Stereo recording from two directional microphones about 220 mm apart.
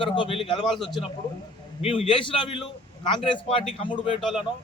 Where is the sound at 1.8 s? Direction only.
25° left (ahead or behind).